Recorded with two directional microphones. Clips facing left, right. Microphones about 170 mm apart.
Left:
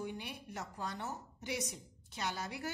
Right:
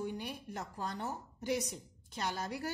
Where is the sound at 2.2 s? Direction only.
45° right (ahead or behind).